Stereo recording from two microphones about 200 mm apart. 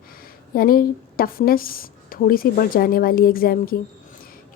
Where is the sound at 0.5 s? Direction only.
45° left (ahead or behind).